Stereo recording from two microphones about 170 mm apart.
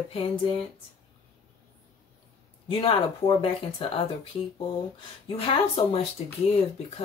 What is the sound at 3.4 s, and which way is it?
Speech, 35° left (ahead or behind).